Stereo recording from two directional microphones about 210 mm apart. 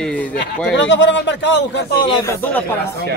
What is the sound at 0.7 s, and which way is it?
A man's voice, 60° left (ahead or behind).